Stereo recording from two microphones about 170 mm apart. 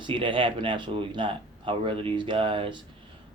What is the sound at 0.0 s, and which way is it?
Speech, 30° right (ahead or behind).